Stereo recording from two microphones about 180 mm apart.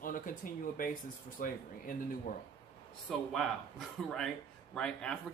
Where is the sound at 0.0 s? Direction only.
50° left (ahead or behind).